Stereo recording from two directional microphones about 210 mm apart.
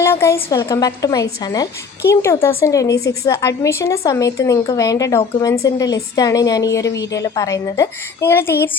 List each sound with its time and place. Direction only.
0.0 s a woman's voice: 10° left (ahead or behind)